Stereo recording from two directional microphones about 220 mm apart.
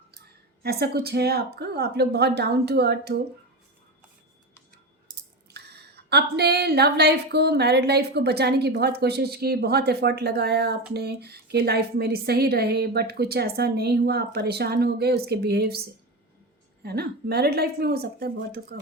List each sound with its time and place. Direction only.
0.6 s a woman's voice: 45° right (ahead or behind)
5.5 s a woman's voice: 50° right (ahead or behind)
16.8 s a woman's voice: 45° right (ahead or behind)